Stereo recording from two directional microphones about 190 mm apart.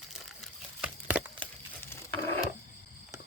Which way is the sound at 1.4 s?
10° left (ahead or behind).